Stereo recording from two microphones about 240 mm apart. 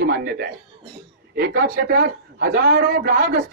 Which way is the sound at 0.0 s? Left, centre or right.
Right.